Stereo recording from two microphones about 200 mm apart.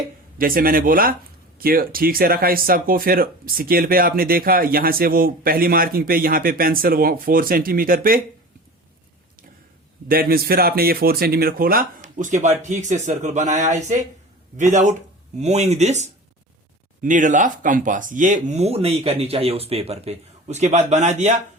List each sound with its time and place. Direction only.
0.3 s speech: 45° right (ahead or behind)
10.1 s speech: 50° right (ahead or behind)